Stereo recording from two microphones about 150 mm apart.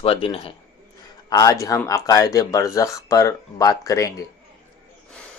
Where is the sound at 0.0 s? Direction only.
40° left (ahead or behind).